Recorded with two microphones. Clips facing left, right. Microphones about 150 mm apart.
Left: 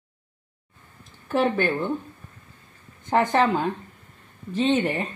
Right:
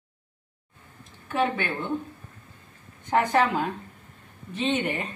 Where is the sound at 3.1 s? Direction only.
30° left (ahead or behind).